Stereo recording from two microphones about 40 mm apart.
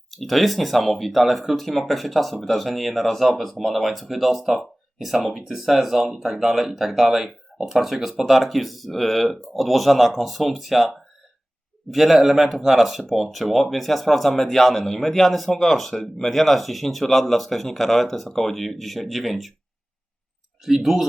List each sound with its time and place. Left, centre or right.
0.1 s speech: centre
20.7 s speech: centre